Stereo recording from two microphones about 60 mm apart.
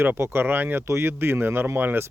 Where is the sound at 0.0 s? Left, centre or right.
Right.